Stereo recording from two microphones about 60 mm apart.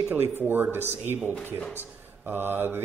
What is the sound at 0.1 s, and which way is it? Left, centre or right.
Speech, right.